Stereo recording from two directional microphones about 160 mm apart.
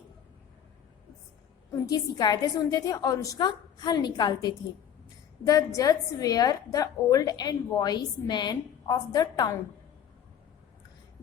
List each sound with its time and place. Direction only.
1.7 s a woman's voice: 25° left (ahead or behind)